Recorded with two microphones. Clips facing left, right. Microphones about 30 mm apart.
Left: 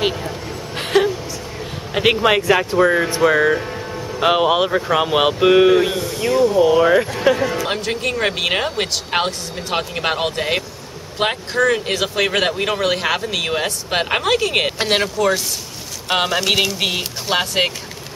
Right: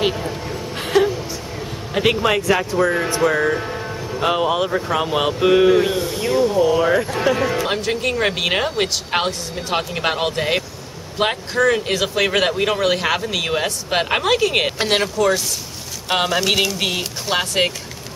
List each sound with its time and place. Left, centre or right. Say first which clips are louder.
0.0 s a sound: even; centre
0.7 s a sound: left 1 dB; centre
2.2 s speech: left 2 dB; centre
3.5 s music: left 1 dB; centre
4.2 s speech: left 3 dB; left
4.6 s speech: left 3 dB; centre
5.4 s speech: left 1 dB; centre
5.9 s speech: right 1 dB; centre
6.2 s speech: left 3 dB; centre
6.6 s speech: left 3 dB; centre
7.6 s speech: right 1 dB; centre